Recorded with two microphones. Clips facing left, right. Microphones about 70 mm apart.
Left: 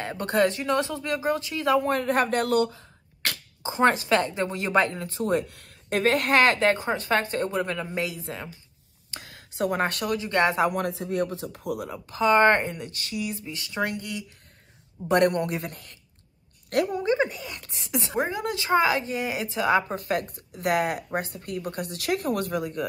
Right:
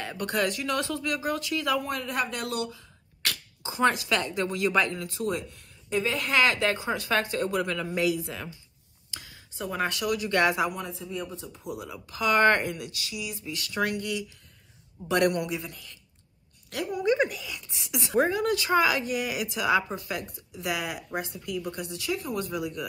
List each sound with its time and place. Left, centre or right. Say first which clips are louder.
0.0 s speech: left 5 dB; left
5.5 s a woman's voice: left 2 dB; left
9.1 s a sound: left 3 dB; left
9.7 s speech: left 1 dB; left
10.1 s a woman's voice: left 1 dB; left
10.7 s speech: left 7 dB; left
11.9 s a woman's voice: left 4 dB; left
13.6 s a woman's voice: right 1 dB; left
15.5 s speech: left 2 dB; left
16.8 s speech: right 2 dB; left
21.9 s speech: left 5 dB; left
22.6 s a woman's voice: left 3 dB; left